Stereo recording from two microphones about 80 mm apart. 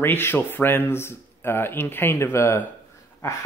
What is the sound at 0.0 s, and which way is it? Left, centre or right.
A man's voice, left.